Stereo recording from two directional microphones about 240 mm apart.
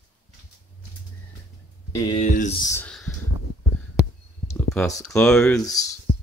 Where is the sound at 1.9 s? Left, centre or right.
Left.